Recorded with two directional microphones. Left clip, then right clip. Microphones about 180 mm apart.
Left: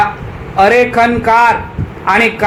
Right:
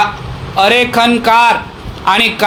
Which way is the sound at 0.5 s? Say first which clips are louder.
Left 1 dB; 40° right (ahead or behind).